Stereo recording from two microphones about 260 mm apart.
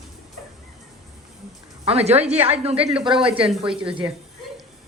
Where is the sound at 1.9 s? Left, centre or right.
Right.